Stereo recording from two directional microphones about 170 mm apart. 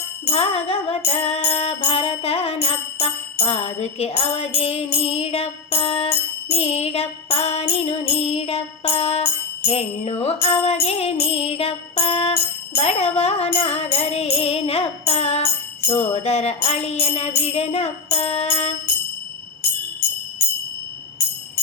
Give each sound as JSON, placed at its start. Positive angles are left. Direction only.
{"t": 0.3, "sound": "music", "side_deg": 35}